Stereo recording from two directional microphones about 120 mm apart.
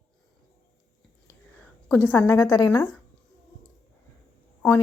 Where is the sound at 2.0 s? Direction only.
15° left (ahead or behind).